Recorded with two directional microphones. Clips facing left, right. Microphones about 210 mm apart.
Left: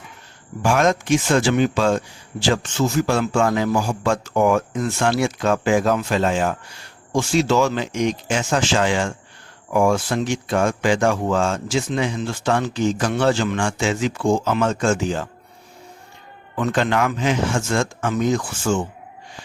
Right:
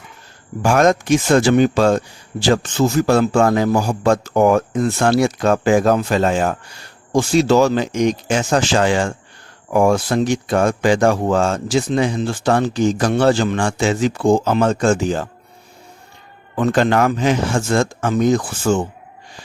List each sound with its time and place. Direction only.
0.6 s speech: 40° right (ahead or behind)
16.6 s speech: 35° right (ahead or behind)